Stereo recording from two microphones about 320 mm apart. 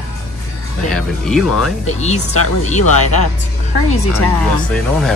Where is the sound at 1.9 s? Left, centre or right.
Left.